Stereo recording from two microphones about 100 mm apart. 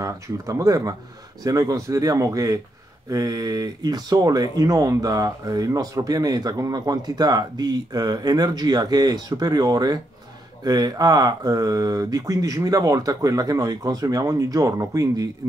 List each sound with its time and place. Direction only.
0.0 s speech: 35° right (ahead or behind)